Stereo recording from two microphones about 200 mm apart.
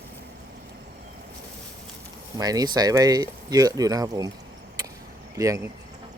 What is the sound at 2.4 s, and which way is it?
Speech, 20° right (ahead or behind).